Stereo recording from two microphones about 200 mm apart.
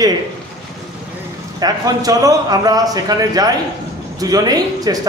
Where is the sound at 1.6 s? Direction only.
20° right (ahead or behind).